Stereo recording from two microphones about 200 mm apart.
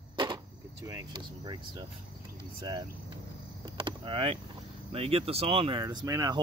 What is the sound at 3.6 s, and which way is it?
Vehicle, 25° right (ahead or behind).